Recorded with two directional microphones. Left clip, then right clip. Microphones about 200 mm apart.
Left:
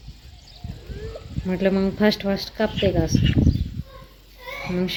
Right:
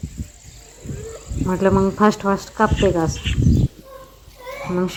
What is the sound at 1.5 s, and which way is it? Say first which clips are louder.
Speech: right 4 dB; 5° right (ahead or behind).